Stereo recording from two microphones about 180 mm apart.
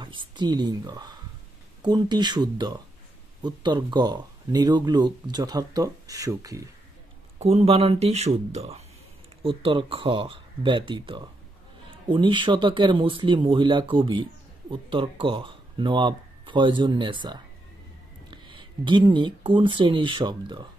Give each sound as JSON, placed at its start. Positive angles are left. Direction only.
{"t": 0.0, "sound": "speech", "side_deg": -25}
{"t": 7.3, "sound": "speech", "side_deg": -35}